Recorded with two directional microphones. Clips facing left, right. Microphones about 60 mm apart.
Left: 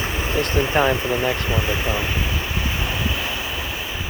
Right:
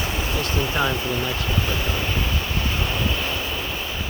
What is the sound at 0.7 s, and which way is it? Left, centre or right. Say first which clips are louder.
Speech: left 6 dB; left.